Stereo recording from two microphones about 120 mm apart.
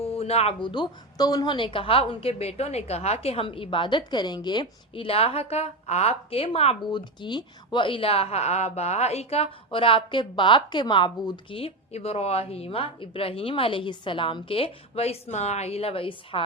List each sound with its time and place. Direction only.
0.0 s a sound: 55° left (ahead or behind)
0.6 s speech: 40° left (ahead or behind); by 6.7 s 60° left (ahead or behind)
6.9 s a woman's voice: 40° left (ahead or behind); by 9.5 s 60° left (ahead or behind)
9.6 s speech: 45° left (ahead or behind)